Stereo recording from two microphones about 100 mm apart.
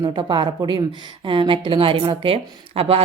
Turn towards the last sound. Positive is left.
turn(degrees=-80)